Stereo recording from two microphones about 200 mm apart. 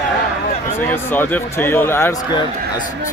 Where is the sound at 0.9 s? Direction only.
10° left (ahead or behind).